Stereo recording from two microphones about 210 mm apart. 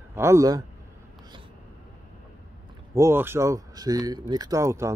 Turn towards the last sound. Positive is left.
turn(degrees=-15)  # may be behind; listen again after turning